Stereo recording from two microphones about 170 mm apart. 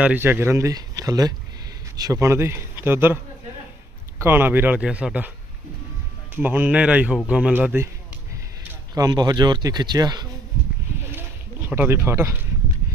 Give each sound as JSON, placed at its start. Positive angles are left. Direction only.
{"t": 0.0, "sound": "speech", "side_deg": -10}
{"t": 4.2, "sound": "speech", "side_deg": -10}
{"t": 6.3, "sound": "speech", "side_deg": -10}
{"t": 8.9, "sound": "speech", "side_deg": -25}
{"t": 11.0, "sound": "a sound", "side_deg": -10}